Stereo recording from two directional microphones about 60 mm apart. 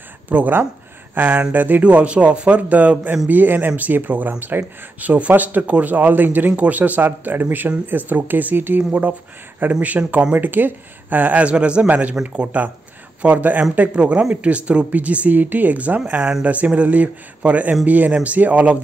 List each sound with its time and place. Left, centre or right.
0.3 s speech: right
16.1 s speech: centre